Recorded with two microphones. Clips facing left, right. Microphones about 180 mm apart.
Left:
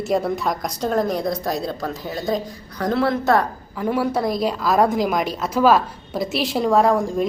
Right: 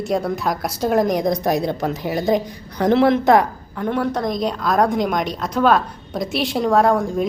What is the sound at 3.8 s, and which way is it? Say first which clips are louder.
A woman's voice: even; 5° left (ahead or behind).